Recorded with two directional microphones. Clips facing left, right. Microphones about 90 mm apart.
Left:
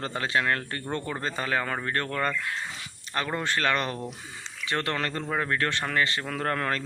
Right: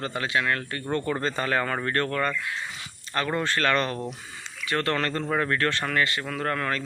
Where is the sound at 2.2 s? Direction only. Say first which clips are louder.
Right 1 dB; 40° left (ahead or behind).